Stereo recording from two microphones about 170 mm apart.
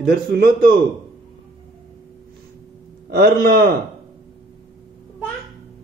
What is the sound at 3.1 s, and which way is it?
Speech, 65° right (ahead or behind).